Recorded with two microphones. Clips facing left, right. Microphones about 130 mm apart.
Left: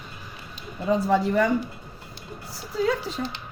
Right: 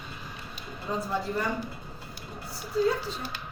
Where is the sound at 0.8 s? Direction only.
90° left.